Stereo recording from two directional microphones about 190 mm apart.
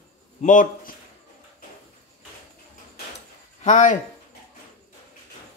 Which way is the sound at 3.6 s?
40° left (ahead or behind).